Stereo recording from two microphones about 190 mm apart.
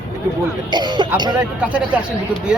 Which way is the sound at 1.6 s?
5° right (ahead or behind).